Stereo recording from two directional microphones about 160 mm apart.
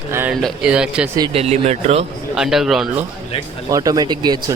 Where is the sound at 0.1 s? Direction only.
15° right (ahead or behind).